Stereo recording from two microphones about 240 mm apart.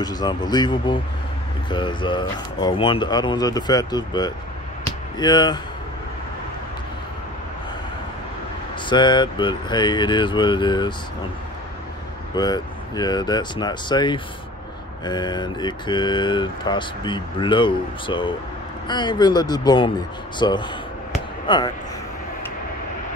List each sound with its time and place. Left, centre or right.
0.0 s speech: centre
8.8 s speech: centre
12.4 s speech: centre